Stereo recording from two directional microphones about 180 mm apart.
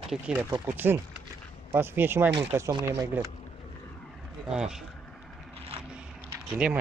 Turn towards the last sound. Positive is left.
turn(degrees=-10)  # may be behind; listen again after turning